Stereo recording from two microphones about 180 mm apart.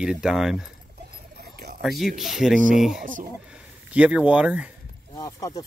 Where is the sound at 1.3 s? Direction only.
60° right (ahead or behind).